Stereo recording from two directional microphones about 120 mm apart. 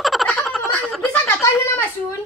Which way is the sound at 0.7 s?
15° left (ahead or behind).